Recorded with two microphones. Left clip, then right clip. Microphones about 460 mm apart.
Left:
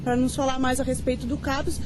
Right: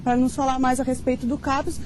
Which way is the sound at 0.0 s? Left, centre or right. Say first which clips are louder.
Right 3 dB; right.